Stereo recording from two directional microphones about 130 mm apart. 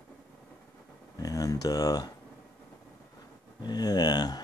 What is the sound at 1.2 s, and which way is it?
Speech, 25° left (ahead or behind).